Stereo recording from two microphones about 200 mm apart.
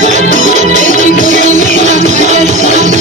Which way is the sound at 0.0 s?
35° right (ahead or behind).